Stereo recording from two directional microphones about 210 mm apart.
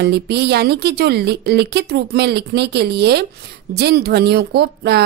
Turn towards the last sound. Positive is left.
turn(degrees=-50)  # may be behind; listen again after turning